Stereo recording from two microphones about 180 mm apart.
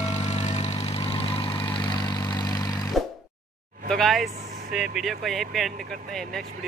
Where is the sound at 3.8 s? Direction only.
Centre (ahead or behind).